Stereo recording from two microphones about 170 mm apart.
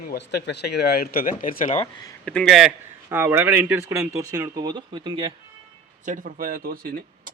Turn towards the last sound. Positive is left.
turn(degrees=-55)  # may be behind; listen again after turning